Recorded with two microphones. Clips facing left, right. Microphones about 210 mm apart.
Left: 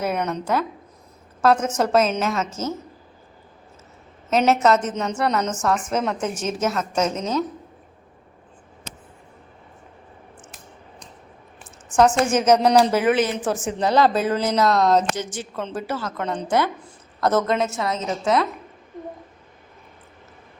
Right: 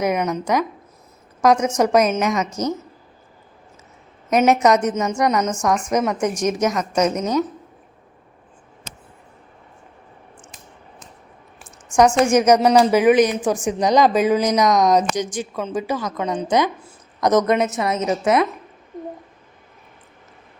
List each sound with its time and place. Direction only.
0.0 s speech: 15° right (ahead or behind)
4.3 s speech: 15° right (ahead or behind)
11.9 s a woman's voice: 10° right (ahead or behind)